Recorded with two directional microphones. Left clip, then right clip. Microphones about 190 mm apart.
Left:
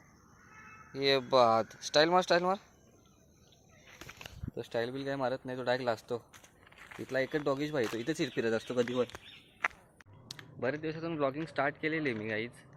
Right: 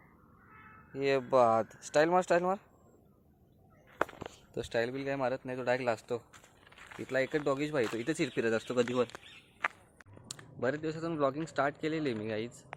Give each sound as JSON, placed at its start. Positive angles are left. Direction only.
{"t": 0.9, "sound": "speech", "side_deg": 0}
{"t": 4.7, "sound": "speech", "side_deg": -5}
{"t": 9.1, "sound": "a sound", "side_deg": -5}
{"t": 10.3, "sound": "computer keyboard", "side_deg": -45}
{"t": 10.8, "sound": "a man's voice", "side_deg": -20}